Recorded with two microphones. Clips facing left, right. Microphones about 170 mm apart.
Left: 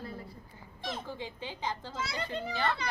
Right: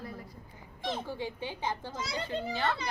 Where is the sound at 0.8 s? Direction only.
30° right (ahead or behind).